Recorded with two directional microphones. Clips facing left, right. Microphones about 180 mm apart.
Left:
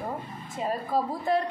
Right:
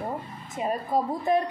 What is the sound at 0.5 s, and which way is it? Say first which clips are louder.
Speech: right 2 dB; 20° right (ahead or behind).